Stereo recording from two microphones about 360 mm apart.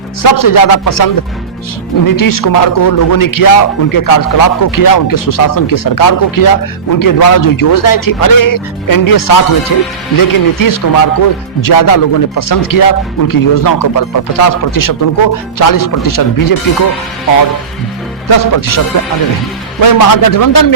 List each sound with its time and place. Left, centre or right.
0.2 s a man's voice: left
18.3 s a man's voice: left
19.8 s a man's voice: left